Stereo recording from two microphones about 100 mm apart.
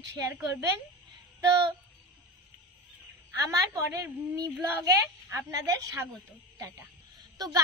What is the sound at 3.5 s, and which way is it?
A woman's voice, 30° right (ahead or behind).